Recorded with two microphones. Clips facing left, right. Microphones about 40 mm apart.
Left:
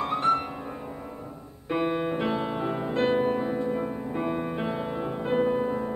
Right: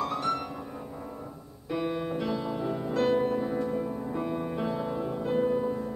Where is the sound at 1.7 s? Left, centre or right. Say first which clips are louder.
Left 4 dB; left.